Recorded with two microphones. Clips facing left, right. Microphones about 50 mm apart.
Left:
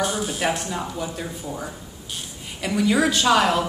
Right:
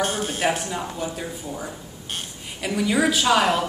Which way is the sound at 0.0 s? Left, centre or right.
Right.